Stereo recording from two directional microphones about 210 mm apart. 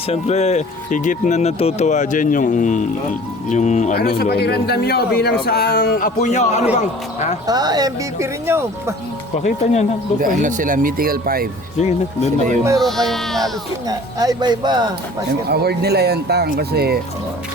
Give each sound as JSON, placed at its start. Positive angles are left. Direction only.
{"t": 0.1, "sound": "speech", "side_deg": 30}
{"t": 4.2, "sound": "a man's voice", "side_deg": 50}
{"t": 6.1, "sound": "speech", "side_deg": 35}
{"t": 7.4, "sound": "speech", "side_deg": -20}
{"t": 9.4, "sound": "speech", "side_deg": 35}
{"t": 10.2, "sound": "speech", "side_deg": -40}
{"t": 11.8, "sound": "speech", "side_deg": 30}
{"t": 12.8, "sound": "speech", "side_deg": 0}
{"t": 13.8, "sound": "speech", "side_deg": -20}
{"t": 15.4, "sound": "speech", "side_deg": -50}